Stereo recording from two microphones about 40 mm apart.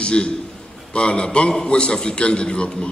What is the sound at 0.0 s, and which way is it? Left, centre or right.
A man's voice, left.